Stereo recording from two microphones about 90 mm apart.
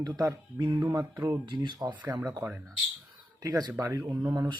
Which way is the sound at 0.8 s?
40° right (ahead or behind).